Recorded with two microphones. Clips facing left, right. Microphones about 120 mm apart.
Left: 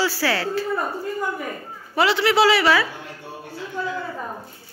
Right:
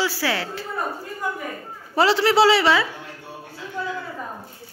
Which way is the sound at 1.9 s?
35° right (ahead or behind).